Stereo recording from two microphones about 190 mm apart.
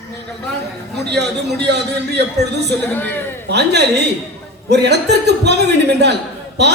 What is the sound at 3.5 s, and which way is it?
A man's voice, 60° right (ahead or behind).